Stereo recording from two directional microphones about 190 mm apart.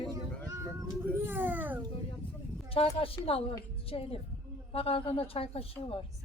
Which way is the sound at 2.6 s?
30° left (ahead or behind).